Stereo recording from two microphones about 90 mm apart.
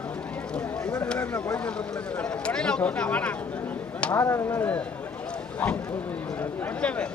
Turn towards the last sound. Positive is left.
turn(degrees=15)  # may be behind; listen again after turning